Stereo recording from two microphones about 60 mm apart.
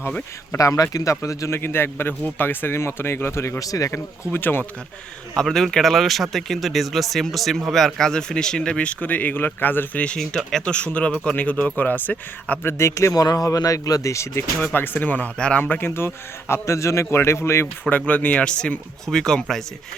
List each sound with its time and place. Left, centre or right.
0.6 s speech: left
1.1 s speech: left
1.5 s speech: left
3.6 s speech: left
3.8 s speech: left
5.4 s speech: centre; by 10.0 s left
10.2 s speech: centre; by 12.5 s left
12.6 s a man's voice: left
13.1 s speech: left
14.6 s speech: left
15.4 s speech: left
15.8 s a man's voice: left
17.8 s speech: left; by 19.6 s centre